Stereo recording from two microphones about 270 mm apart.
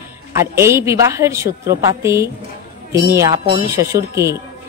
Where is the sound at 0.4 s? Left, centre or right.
Centre.